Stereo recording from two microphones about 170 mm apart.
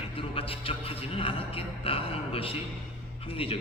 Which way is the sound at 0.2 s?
35° left (ahead or behind).